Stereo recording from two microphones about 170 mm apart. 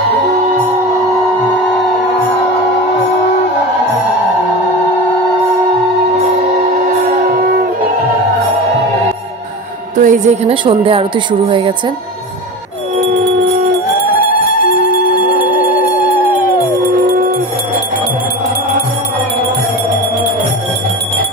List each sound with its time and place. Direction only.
9.9 s a woman's voice: 50° right (ahead or behind)
10.5 s speech: 30° right (ahead or behind)
14.1 s music: 55° left (ahead or behind)
15.3 s music: 10° right (ahead or behind)